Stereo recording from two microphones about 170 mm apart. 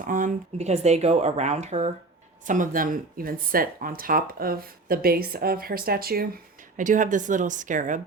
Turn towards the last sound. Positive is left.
turn(degrees=-50)  # may be behind; listen again after turning